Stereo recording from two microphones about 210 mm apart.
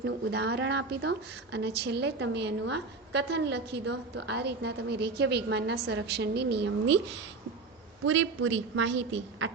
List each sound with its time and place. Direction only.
0.0 s a woman's voice: 55° right (ahead or behind)
8.0 s a woman's voice: 70° right (ahead or behind)